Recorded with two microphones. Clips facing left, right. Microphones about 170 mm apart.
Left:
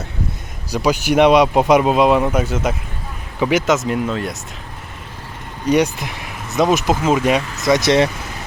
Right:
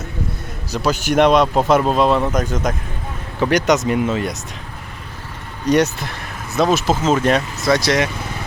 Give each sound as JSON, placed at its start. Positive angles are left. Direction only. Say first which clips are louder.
{"t": 0.7, "sound": "speech", "louder": "left 2 dB", "side_deg": 10}
{"t": 5.6, "sound": "speech", "louder": "even", "side_deg": 10}